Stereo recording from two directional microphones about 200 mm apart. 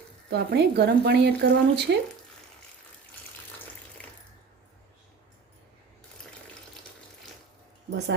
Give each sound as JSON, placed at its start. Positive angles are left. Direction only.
{"t": 0.3, "sound": "speech", "side_deg": -55}
{"t": 7.9, "sound": "speech", "side_deg": -55}